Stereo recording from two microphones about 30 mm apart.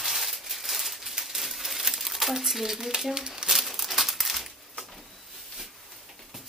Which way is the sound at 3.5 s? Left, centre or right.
Centre.